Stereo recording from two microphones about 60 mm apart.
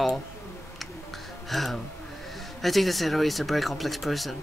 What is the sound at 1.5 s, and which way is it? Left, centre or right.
Speech, centre.